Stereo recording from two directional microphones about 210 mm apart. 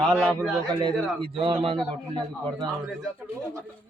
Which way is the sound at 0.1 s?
Centre (ahead or behind).